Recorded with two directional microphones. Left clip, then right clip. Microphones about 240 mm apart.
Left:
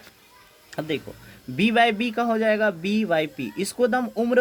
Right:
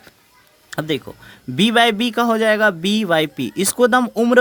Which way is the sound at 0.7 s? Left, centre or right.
Right.